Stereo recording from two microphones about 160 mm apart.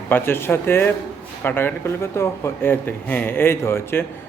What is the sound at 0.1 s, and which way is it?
Speech, 15° left (ahead or behind).